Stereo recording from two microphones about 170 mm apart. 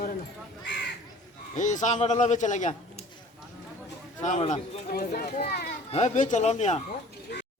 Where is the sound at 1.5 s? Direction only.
45° left (ahead or behind).